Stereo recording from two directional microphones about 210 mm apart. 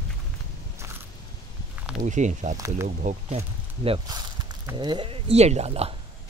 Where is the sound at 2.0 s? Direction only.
35° right (ahead or behind).